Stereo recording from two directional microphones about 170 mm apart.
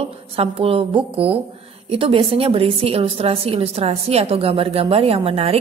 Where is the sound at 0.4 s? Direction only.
35° right (ahead or behind).